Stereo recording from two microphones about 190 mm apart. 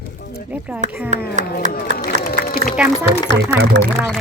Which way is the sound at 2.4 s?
50° left (ahead or behind).